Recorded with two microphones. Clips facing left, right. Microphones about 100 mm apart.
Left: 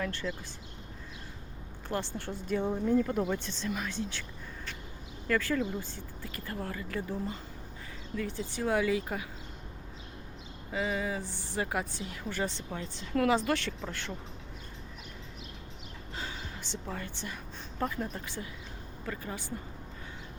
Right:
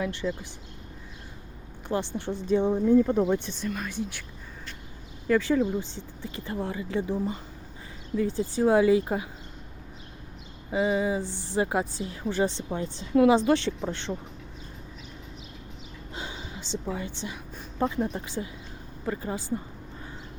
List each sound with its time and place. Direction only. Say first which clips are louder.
0.0 s speech: right 5 dB; 15° right (ahead or behind)
1.9 s speech: right 6 dB; 20° right (ahead or behind)
5.3 s speech: right 7 dB; 20° right (ahead or behind)
10.7 s a woman's voice: right 7 dB; 25° right (ahead or behind)
16.1 s a sound: right 3 dB; 20° right (ahead or behind)
16.7 s speech: right 8 dB; 10° right (ahead or behind); by 19.4 s 30° right (ahead or behind)